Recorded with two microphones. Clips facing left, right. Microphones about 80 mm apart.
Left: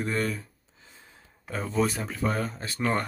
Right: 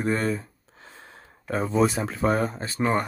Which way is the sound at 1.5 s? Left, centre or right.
Right.